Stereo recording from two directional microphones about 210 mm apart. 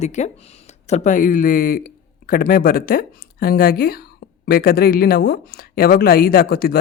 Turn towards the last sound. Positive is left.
turn(degrees=45)  # may be behind; listen again after turning